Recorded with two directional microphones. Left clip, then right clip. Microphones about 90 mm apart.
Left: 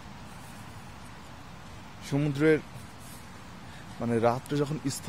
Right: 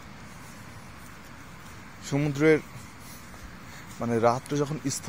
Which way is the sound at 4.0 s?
5° left (ahead or behind).